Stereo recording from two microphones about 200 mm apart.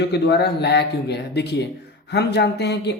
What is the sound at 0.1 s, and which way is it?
Speech, 55° left (ahead or behind).